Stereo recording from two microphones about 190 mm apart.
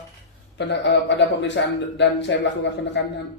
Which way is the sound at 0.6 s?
70° left (ahead or behind).